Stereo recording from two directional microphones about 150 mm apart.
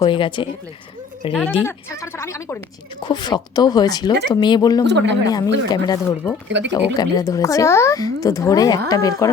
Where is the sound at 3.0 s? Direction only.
30° left (ahead or behind).